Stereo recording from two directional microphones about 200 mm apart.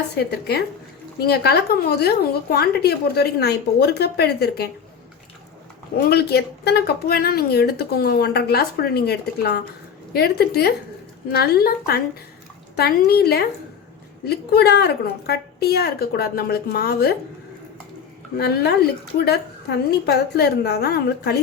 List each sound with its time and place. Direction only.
0.1 s a woman's voice: 55° left (ahead or behind)
6.1 s a woman's voice: 55° left (ahead or behind)
18.3 s a woman's voice: 55° left (ahead or behind)